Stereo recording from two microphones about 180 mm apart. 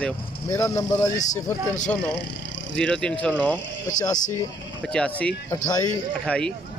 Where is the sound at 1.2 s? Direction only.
40° left (ahead or behind).